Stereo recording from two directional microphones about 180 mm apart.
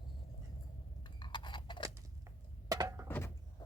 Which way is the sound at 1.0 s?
25° left (ahead or behind).